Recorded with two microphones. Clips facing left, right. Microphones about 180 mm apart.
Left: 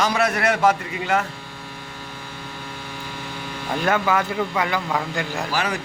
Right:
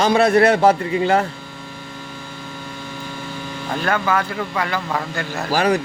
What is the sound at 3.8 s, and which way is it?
Speech, 20° left (ahead or behind).